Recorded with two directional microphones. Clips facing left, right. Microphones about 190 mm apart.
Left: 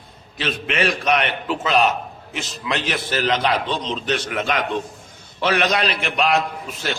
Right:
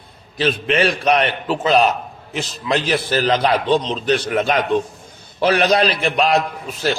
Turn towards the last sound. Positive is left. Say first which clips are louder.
# right 5 dB
turn(degrees=-35)  # may be behind; listen again after turning